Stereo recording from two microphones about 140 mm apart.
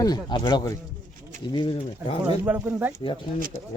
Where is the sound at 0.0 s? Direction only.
30° left (ahead or behind).